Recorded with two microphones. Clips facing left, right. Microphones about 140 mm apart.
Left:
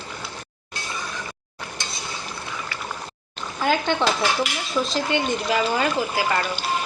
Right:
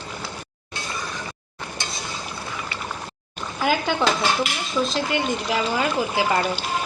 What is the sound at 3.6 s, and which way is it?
Speech, 10° right (ahead or behind).